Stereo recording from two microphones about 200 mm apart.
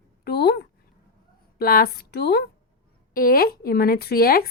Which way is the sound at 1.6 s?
45° left (ahead or behind).